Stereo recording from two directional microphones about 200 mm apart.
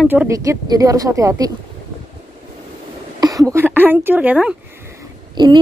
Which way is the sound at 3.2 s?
15° right (ahead or behind).